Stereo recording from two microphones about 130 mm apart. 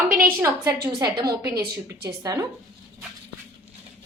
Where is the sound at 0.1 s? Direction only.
90° right.